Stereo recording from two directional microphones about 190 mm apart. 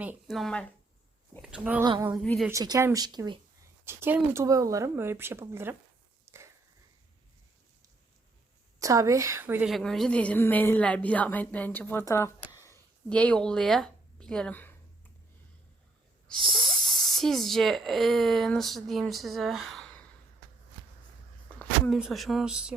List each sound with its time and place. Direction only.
0.0 s speech: 5° right (ahead or behind)
1.8 s a sound: 20° right (ahead or behind)
2.5 s speech: 15° right (ahead or behind)
3.8 s speech: 10° right (ahead or behind)
6.3 s a sound: 10° right (ahead or behind)
8.8 s a woman's voice: 15° right (ahead or behind); by 14.8 s 10° left (ahead or behind)
16.3 s a sound: 25° right (ahead or behind)
16.6 s speech: centre (ahead or behind)
21.6 s speech: centre (ahead or behind)